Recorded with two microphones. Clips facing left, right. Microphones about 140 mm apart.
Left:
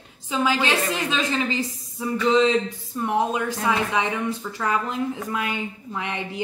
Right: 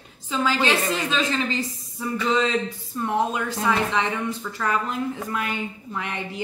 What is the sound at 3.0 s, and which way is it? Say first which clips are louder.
Speech: left 1 dB; 15° left (ahead or behind).